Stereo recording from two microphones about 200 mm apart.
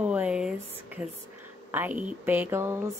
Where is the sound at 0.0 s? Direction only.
5° right (ahead or behind).